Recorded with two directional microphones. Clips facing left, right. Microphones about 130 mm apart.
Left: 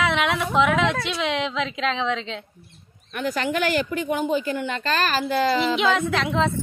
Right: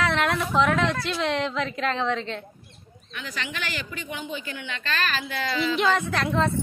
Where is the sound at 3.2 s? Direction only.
50° left (ahead or behind).